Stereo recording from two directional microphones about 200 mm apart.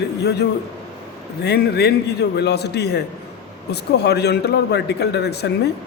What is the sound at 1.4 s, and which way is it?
A man's voice, 55° left (ahead or behind).